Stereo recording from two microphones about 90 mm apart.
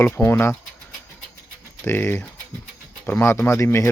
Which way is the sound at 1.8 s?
20° left (ahead or behind).